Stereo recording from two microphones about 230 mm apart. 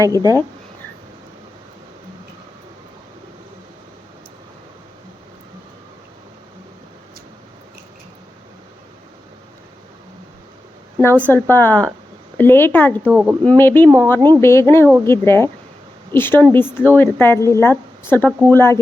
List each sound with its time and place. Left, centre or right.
0.0 s speech: centre
11.0 s speech: centre
13.1 s speech: centre
13.4 s speech: centre